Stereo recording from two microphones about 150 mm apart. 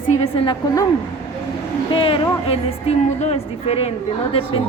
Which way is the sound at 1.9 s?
35° left (ahead or behind).